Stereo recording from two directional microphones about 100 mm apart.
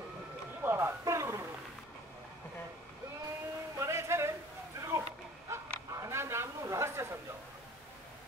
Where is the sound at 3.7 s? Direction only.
25° right (ahead or behind).